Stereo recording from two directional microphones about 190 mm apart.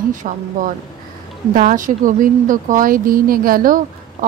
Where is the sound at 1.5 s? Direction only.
45° right (ahead or behind).